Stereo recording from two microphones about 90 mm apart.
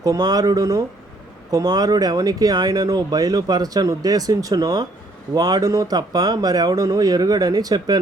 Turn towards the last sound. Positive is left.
turn(degrees=-45)  # may be behind; listen again after turning